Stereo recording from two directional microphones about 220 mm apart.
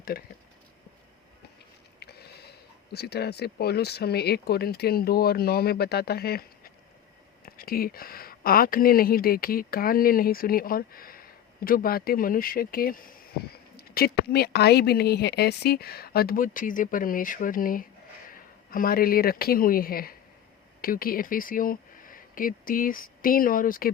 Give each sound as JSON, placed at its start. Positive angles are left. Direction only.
{"t": 2.0, "sound": "speech", "side_deg": 45}
{"t": 7.4, "sound": "a woman's voice", "side_deg": 40}